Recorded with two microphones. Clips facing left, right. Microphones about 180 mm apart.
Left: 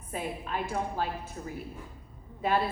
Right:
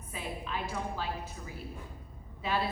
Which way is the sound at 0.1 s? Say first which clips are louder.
Left 4 dB; 50° left (ahead or behind).